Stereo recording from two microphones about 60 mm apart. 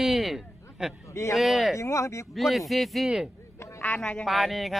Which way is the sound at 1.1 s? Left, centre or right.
Left.